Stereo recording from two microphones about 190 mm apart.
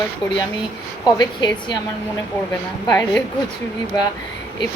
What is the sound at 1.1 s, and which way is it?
Speech, 20° left (ahead or behind).